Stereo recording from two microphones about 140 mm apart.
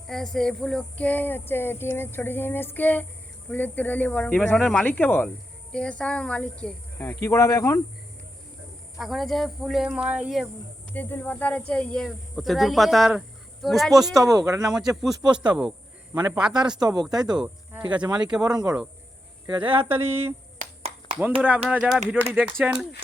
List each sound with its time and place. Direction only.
0.1 s a sound: 5° left (ahead or behind); by 7.8 s 20° left (ahead or behind)
9.0 s speech: centre (ahead or behind)
10.9 s speech: 10° left (ahead or behind)
14.3 s speech: 25° right (ahead or behind)
14.8 s speech: 5° right (ahead or behind)
16.1 s speech: 25° right (ahead or behind)
16.4 s speech: 5° right (ahead or behind)
17.0 s speech: 30° right (ahead or behind)
17.3 s speech: 5° right (ahead or behind)
18.4 s speech: 25° right (ahead or behind)
19.9 s speech: 15° right (ahead or behind)
21.7 s speech: centre (ahead or behind)